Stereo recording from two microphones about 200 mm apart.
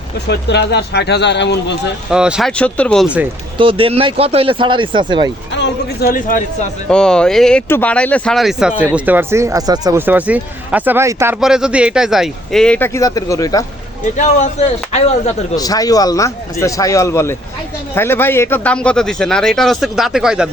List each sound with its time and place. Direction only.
0.3 s speech: 60° left (ahead or behind)
2.0 s speech: 5° right (ahead or behind)
3.6 s speech: 25° right (ahead or behind)
5.5 s speech: 60° left (ahead or behind)
6.1 s speech: 40° left (ahead or behind)
6.8 s speech: 5° left (ahead or behind)
14.2 s speech: 35° left (ahead or behind)
15.5 s a man's voice: 20° left (ahead or behind); by 20.5 s 5° right (ahead or behind)